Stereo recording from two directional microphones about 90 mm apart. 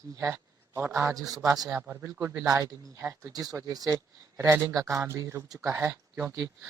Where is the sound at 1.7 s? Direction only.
20° right (ahead or behind).